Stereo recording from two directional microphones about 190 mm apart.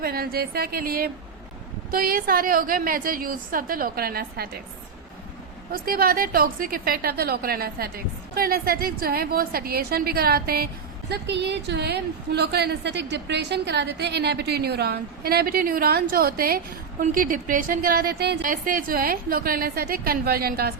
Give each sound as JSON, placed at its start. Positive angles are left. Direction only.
{"t": 0.0, "sound": "a woman's voice", "side_deg": -50}
{"t": 5.7, "sound": "a woman's voice", "side_deg": -50}